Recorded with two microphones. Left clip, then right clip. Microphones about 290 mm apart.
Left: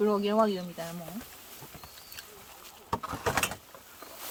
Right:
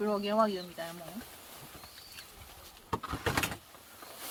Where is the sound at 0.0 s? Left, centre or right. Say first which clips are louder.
Left 3 dB; left.